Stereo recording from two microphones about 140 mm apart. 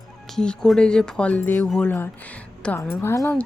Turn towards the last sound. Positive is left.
turn(degrees=15)  # may be behind; listen again after turning